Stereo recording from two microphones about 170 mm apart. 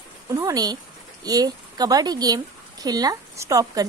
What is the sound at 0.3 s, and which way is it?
A woman's voice, 20° right (ahead or behind).